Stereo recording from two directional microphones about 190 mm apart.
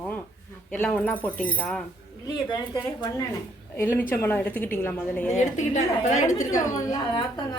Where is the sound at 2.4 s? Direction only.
20° left (ahead or behind).